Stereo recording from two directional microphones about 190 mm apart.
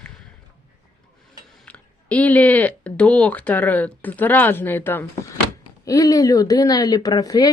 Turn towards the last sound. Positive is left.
turn(degrees=20)  # may be behind; listen again after turning